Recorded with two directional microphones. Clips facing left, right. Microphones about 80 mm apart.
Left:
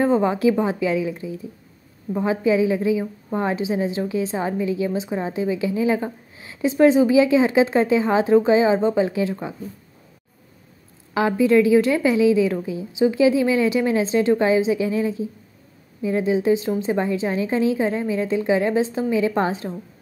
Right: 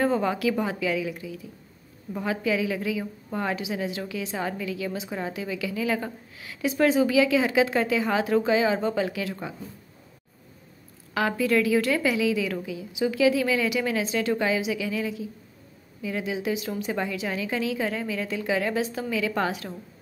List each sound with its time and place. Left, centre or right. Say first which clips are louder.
0.0 s a woman's voice: left 6 dB; left
11.1 s a woman's voice: left 7 dB; left